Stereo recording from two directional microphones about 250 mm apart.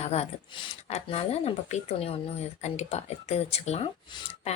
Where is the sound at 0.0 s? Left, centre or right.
Left.